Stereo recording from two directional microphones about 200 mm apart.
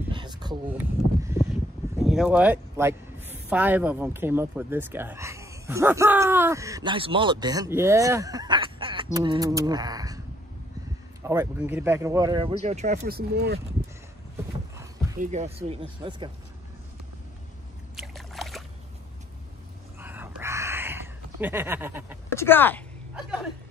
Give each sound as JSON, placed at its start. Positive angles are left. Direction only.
{"t": 0.1, "sound": "a sound", "side_deg": -20}
{"t": 0.7, "sound": "speech", "side_deg": -15}
{"t": 2.0, "sound": "speech", "side_deg": -5}
{"t": 11.2, "sound": "speech", "side_deg": -10}
{"t": 12.6, "sound": "speech", "side_deg": -35}
{"t": 13.0, "sound": "speech", "side_deg": -55}
{"t": 15.1, "sound": "speech", "side_deg": -35}
{"t": 17.9, "sound": "boat", "side_deg": 0}
{"t": 20.0, "sound": "a sound", "side_deg": -10}
{"t": 22.3, "sound": "speech", "side_deg": 10}